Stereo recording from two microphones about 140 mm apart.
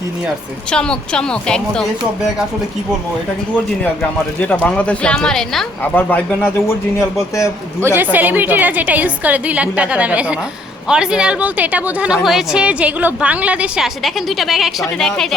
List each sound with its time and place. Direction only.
0.7 s a woman's voice: 5° left (ahead or behind)
4.4 s a man's voice: 10° left (ahead or behind)
8.1 s a woman's voice: 15° right (ahead or behind); by 15.4 s 5° left (ahead or behind)